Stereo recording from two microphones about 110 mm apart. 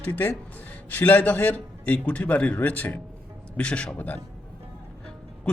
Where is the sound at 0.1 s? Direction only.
15° left (ahead or behind).